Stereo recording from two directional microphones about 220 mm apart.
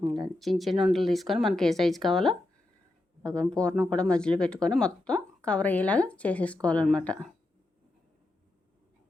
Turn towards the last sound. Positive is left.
turn(degrees=5)  # may be behind; listen again after turning